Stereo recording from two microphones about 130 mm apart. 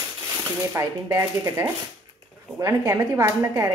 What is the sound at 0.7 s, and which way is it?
Speech, 20° right (ahead or behind).